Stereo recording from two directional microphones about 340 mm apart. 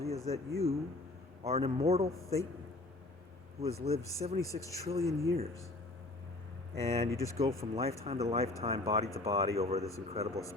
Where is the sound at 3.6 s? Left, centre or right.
Centre.